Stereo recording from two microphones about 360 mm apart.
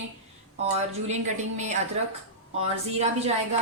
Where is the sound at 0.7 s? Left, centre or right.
Centre.